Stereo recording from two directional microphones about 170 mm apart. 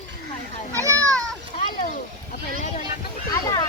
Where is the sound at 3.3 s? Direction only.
20° left (ahead or behind).